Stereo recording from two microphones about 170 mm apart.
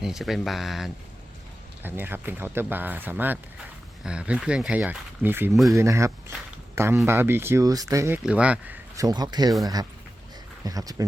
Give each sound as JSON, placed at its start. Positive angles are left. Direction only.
{"t": 0.0, "sound": "speech", "side_deg": 0}
{"t": 1.8, "sound": "speech", "side_deg": -10}
{"t": 8.2, "sound": "speech", "side_deg": -5}
{"t": 9.0, "sound": "speech", "side_deg": -25}
{"t": 10.6, "sound": "speech", "side_deg": -20}